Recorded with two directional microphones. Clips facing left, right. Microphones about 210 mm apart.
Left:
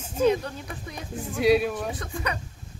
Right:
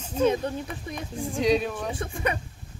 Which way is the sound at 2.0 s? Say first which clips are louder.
Right 3 dB; 25° right (ahead or behind).